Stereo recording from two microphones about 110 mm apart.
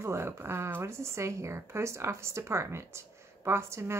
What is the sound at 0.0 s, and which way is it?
Speech, 25° right (ahead or behind).